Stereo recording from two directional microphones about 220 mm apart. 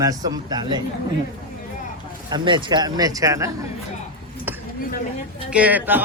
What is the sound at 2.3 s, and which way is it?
Speech, 20° right (ahead or behind).